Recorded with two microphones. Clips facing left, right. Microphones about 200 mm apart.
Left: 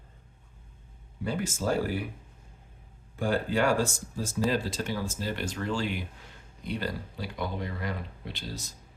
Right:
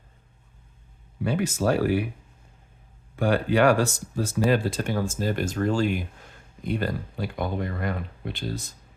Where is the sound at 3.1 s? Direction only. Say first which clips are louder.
Right 5 dB; 70° right (ahead or behind).